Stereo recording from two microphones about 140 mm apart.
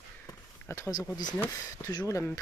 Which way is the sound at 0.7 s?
25° left (ahead or behind).